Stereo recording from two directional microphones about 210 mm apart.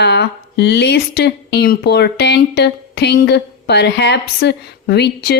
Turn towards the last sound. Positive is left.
turn(degrees=50)  # may be behind; listen again after turning